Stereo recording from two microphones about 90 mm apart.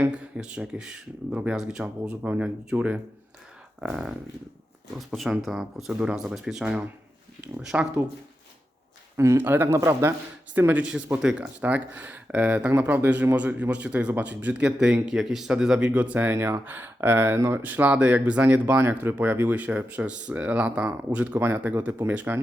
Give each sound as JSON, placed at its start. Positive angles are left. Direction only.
{"t": 0.0, "sound": "speech", "side_deg": -15}
{"t": 9.1, "sound": "speech", "side_deg": -35}